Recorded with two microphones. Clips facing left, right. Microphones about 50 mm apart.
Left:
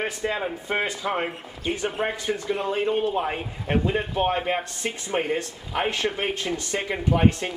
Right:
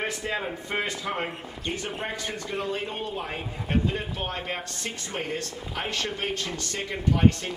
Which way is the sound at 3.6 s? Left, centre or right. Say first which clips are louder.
Left 4 dB; left.